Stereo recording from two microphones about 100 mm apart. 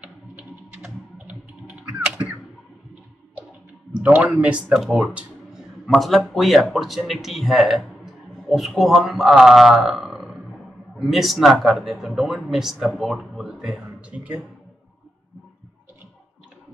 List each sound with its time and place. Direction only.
0.0 s typing: 15° right (ahead or behind)
3.9 s speech: 15° right (ahead or behind)